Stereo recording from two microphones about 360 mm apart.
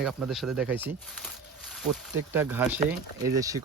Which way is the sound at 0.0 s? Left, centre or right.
Centre.